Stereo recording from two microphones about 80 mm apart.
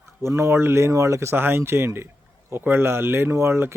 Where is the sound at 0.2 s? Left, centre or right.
Right.